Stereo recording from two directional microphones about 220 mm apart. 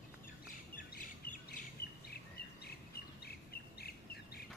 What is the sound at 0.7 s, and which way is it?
Squawk, 40° left (ahead or behind).